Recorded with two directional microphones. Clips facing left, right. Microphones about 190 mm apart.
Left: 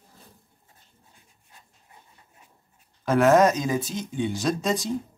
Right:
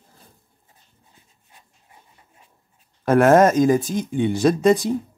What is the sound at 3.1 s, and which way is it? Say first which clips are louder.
Speech: right 4 dB; 55° right (ahead or behind).